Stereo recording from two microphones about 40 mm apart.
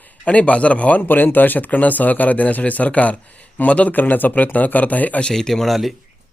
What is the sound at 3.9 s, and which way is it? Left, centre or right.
Speech, left.